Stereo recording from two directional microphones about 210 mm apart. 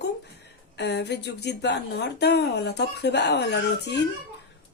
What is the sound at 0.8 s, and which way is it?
Speech, 55° left (ahead or behind).